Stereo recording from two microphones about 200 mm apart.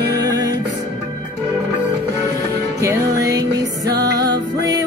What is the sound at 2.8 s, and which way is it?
Music, 15° right (ahead or behind).